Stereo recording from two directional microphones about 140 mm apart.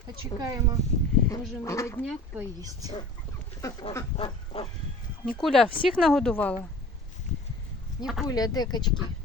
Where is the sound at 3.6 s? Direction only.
25° left (ahead or behind).